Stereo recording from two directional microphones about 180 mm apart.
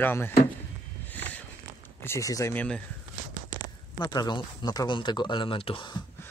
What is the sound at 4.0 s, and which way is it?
Speech, 25° left (ahead or behind).